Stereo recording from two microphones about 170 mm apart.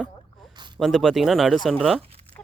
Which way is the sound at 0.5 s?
25° right (ahead or behind).